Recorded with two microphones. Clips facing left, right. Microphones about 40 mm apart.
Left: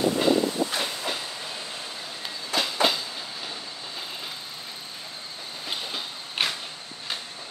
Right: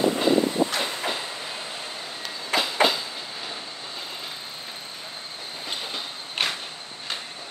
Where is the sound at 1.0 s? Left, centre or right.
Centre.